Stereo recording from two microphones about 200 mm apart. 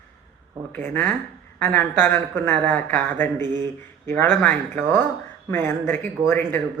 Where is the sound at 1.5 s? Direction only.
10° left (ahead or behind).